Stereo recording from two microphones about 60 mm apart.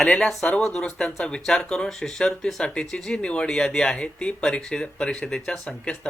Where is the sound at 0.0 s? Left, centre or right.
Centre.